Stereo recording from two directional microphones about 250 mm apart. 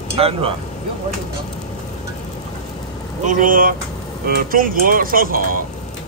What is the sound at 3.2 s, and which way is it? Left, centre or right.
Speech, right.